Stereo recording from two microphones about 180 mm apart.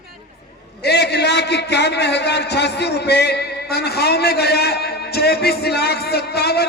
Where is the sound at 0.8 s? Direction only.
65° left (ahead or behind).